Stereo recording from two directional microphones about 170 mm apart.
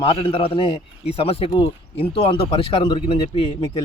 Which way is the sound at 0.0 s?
35° left (ahead or behind).